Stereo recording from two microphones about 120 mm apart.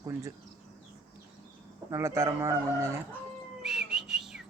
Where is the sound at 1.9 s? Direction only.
25° right (ahead or behind).